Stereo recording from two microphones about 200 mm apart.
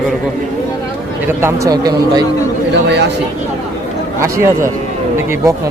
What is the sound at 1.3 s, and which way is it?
Speech, 10° right (ahead or behind).